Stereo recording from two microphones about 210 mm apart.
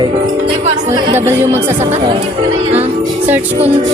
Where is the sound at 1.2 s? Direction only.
10° right (ahead or behind).